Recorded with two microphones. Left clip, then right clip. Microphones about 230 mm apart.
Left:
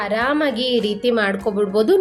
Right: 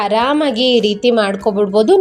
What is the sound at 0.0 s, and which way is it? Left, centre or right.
A woman's voice, right.